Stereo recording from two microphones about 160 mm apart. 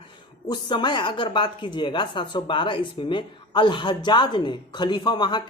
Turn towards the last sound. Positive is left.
turn(degrees=30)  # may be behind; listen again after turning